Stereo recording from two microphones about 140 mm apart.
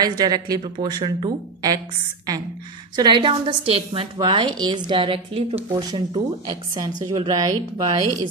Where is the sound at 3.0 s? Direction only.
35° right (ahead or behind).